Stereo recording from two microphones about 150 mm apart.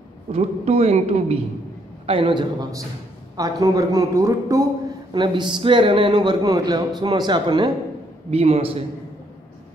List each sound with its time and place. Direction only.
0.3 s speech: 45° right (ahead or behind)
8.3 s speech: 40° right (ahead or behind)